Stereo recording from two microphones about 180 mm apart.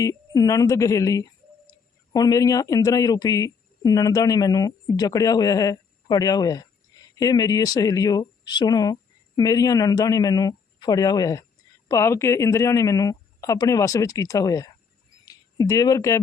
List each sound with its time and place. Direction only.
0.0 s speech: 20° left (ahead or behind)